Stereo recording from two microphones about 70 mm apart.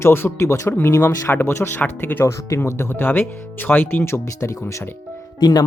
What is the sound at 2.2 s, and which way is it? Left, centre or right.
Speech, left.